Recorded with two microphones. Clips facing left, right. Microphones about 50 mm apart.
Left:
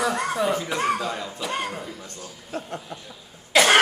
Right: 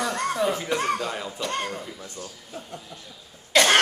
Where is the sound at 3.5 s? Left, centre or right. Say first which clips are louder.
Left 1 dB; centre.